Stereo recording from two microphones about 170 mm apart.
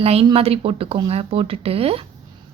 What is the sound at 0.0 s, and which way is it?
A woman's voice, 35° right (ahead or behind).